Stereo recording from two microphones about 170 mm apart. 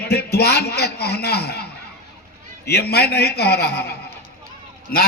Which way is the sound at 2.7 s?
70° left (ahead or behind).